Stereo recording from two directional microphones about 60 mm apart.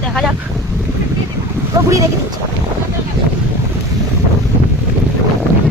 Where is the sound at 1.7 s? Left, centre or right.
Right.